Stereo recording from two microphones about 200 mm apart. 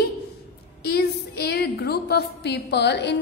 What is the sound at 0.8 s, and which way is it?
A woman's voice, 55° left (ahead or behind).